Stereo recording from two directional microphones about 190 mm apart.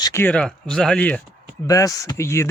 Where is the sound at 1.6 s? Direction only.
15° left (ahead or behind).